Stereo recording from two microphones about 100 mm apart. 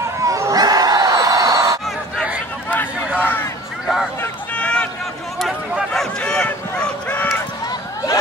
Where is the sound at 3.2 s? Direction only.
20° left (ahead or behind).